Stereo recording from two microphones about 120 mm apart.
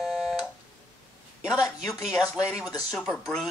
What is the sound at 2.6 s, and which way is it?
Speech, 30° left (ahead or behind).